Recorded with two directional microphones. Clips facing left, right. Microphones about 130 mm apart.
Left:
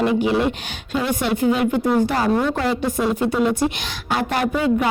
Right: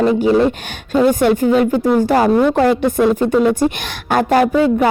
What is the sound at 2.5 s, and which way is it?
A woman's voice, 60° right (ahead or behind).